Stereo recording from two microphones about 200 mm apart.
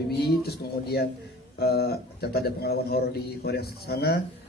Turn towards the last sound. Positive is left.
turn(degrees=55)  # may be behind; listen again after turning